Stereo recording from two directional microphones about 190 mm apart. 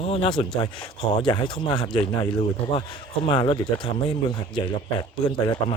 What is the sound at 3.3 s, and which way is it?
Speech, 25° left (ahead or behind).